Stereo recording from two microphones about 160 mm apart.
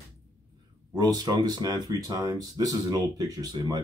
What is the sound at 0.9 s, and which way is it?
Speech, 25° right (ahead or behind).